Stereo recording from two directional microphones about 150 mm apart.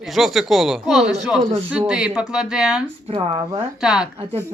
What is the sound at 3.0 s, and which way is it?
Speech, 40° right (ahead or behind).